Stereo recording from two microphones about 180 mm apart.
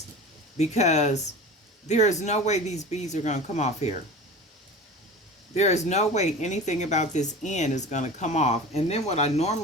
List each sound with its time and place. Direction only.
0.5 s speech: 40° left (ahead or behind)
5.5 s speech: 40° left (ahead or behind)